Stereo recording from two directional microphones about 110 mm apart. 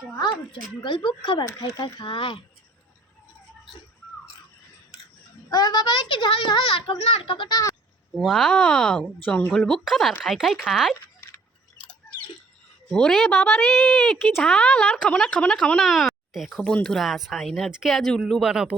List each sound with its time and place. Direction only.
0.2 s speech: 45° left (ahead or behind)
5.5 s speech: 40° left (ahead or behind); by 7.5 s 55° left (ahead or behind)
7.5 s speech: 30° left (ahead or behind)
8.2 s speech: centre (ahead or behind)
12.9 s a woman's voice: 5° left (ahead or behind)